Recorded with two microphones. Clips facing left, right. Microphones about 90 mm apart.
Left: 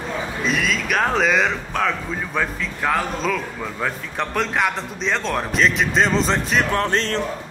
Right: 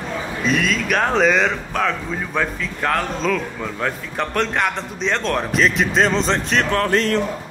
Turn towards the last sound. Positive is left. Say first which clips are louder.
# right 3 dB
turn(degrees=30)  # may be behind; listen again after turning